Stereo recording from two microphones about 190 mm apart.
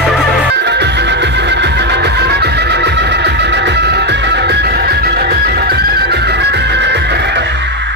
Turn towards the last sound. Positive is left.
turn(degrees=-65)  # may be behind; listen again after turning